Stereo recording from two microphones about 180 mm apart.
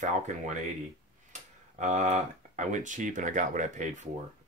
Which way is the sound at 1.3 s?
45° right (ahead or behind).